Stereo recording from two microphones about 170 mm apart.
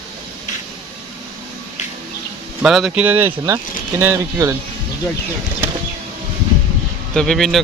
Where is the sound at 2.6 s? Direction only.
Centre (ahead or behind).